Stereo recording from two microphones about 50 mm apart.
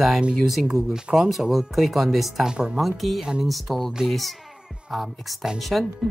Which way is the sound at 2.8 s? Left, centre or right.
Centre.